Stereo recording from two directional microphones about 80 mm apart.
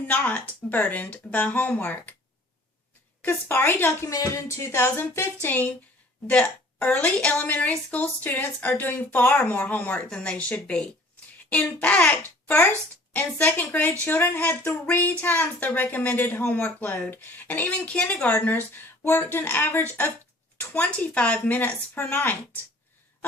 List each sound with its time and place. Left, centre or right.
0.1 s speech: centre
3.2 s speech: left
4.0 s music: left
6.2 s a woman's voice: centre